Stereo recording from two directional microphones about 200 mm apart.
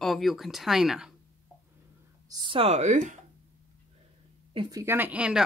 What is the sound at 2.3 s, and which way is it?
Speech, 25° right (ahead or behind).